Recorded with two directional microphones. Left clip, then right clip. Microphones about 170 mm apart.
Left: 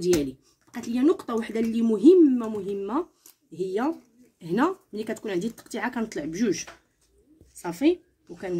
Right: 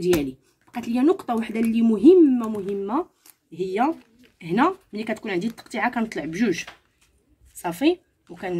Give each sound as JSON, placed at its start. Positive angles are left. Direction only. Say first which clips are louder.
{"t": 0.0, "sound": "speech", "louder": "right 2 dB", "side_deg": -25}
{"t": 7.6, "sound": "speech", "louder": "right 2 dB", "side_deg": -15}